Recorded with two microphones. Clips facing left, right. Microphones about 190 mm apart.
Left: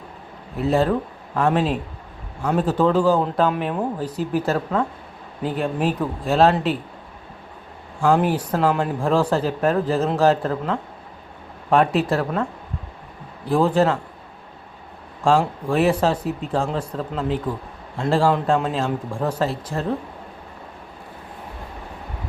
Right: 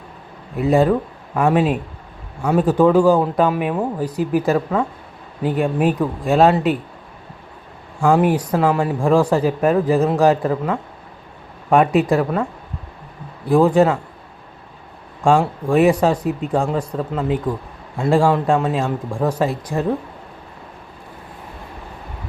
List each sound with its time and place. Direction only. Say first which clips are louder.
0.5 s speech: right 4 dB; 10° right (ahead or behind)
8.1 s speech: right 4 dB; 10° right (ahead or behind)
13.5 s speech: right 4 dB; 10° right (ahead or behind)
15.7 s speech: right 4 dB; 10° right (ahead or behind)